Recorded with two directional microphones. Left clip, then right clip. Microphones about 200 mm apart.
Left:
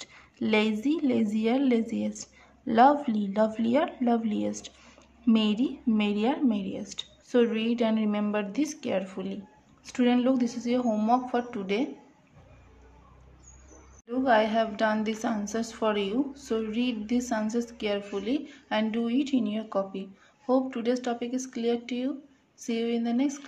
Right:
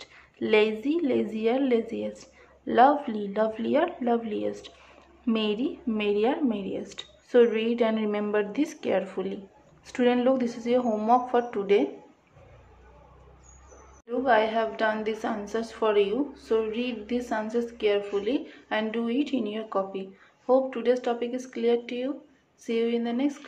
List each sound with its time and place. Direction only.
0.0 s a woman's voice: 20° left (ahead or behind)
14.0 s a woman's voice: 30° left (ahead or behind)